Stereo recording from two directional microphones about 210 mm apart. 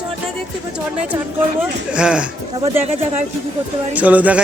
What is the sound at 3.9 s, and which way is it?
Speech, 5° right (ahead or behind).